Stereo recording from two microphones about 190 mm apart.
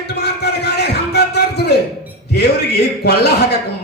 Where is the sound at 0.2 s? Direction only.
60° left (ahead or behind).